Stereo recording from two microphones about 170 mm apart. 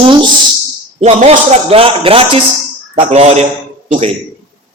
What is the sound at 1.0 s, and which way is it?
A man's voice, 40° right (ahead or behind).